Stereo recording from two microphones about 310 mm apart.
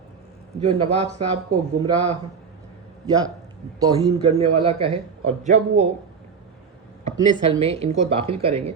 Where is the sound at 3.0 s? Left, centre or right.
Centre.